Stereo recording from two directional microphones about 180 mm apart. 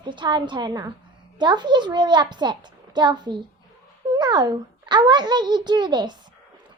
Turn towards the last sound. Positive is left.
turn(degrees=-25)  # may be behind; listen again after turning